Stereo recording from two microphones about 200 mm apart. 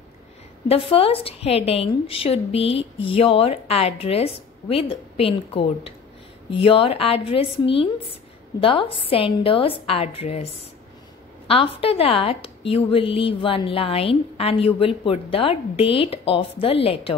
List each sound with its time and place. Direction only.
0.7 s a woman's voice: 30° left (ahead or behind)
11.4 s a woman's voice: 25° left (ahead or behind)